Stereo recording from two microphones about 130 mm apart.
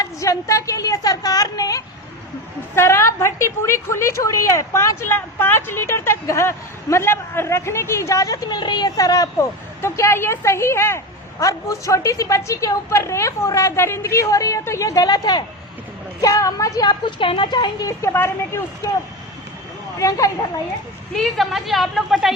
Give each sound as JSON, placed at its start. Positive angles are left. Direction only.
{"t": 0.0, "sound": "a woman's voice", "side_deg": 25}
{"t": 18.0, "sound": "a woman's voice", "side_deg": 20}
{"t": 20.0, "sound": "a woman's voice", "side_deg": 25}
{"t": 21.1, "sound": "a woman's voice", "side_deg": 0}